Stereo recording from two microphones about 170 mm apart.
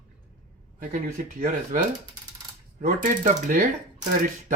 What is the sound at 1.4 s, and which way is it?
Speech, 50° right (ahead or behind).